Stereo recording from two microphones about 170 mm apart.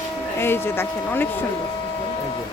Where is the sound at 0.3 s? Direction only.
15° left (ahead or behind).